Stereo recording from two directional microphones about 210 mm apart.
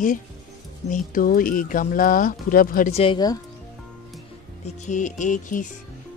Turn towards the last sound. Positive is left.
turn(degrees=35)  # may be behind; listen again after turning